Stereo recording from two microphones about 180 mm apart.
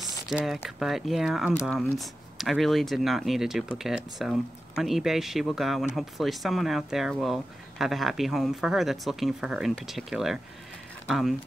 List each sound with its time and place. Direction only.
0.3 s speech: 5° right (ahead or behind)